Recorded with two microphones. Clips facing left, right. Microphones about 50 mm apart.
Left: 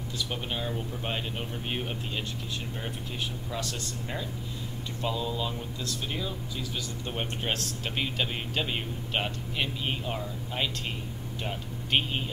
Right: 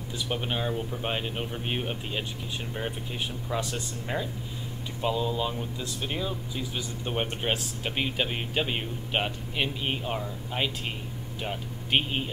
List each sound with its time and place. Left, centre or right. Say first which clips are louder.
0.3 s speech: right 5 dB; centre
3.4 s speech: right 3 dB; centre